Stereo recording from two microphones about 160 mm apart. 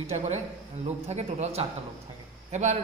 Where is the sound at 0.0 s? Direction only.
40° right (ahead or behind).